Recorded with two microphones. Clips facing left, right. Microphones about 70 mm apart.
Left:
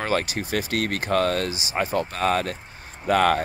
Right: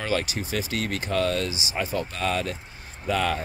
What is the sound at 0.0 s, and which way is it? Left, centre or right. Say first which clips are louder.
Speech: left 2 dB; left.